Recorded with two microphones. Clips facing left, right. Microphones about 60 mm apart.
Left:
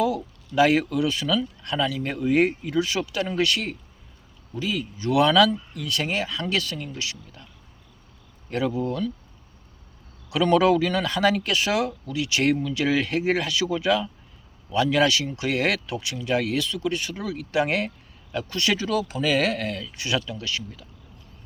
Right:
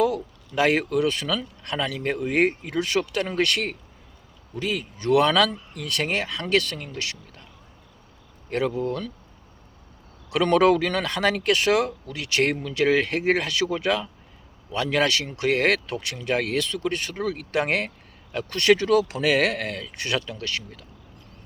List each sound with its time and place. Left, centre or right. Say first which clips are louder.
0.0 s speech: right 1 dB; right
8.4 s speech: right 1 dB; right
10.2 s speech: right 1 dB; right